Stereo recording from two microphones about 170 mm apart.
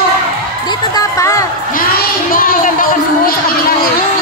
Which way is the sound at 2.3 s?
55° left (ahead or behind).